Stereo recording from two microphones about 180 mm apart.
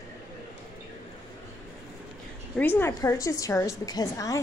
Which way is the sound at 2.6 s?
10° left (ahead or behind).